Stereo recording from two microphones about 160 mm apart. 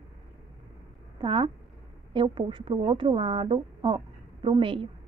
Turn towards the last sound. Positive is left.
turn(degrees=-35)  # may be behind; listen again after turning